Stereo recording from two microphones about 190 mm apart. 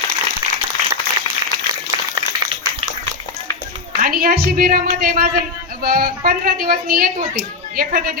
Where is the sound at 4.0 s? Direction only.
50° right (ahead or behind).